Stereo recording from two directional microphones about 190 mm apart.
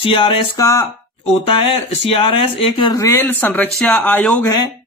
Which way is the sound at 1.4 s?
30° left (ahead or behind).